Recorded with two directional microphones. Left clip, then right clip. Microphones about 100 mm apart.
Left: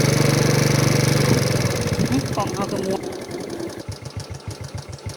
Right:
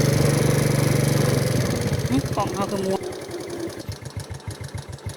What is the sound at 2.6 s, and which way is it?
Vehicle, 20° right (ahead or behind).